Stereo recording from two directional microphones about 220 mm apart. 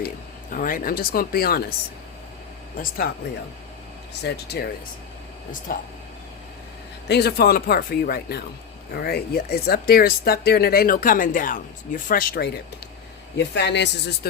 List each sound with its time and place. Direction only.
0.5 s speech: 40° left (ahead or behind)
2.7 s speech: 40° left (ahead or behind)
4.1 s speech: 50° left (ahead or behind)
7.1 s speech: 45° left (ahead or behind)